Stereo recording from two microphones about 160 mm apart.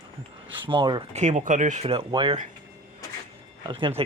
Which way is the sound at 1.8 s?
30° right (ahead or behind).